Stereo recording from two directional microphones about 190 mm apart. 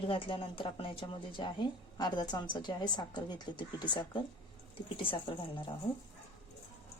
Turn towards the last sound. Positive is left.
turn(degrees=25)  # may be behind; listen again after turning